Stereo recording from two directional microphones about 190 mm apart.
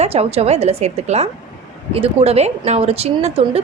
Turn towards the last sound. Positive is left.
turn(degrees=-30)  # may be behind; listen again after turning